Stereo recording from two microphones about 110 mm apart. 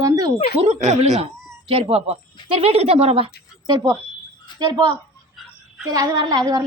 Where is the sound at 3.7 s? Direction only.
40° right (ahead or behind).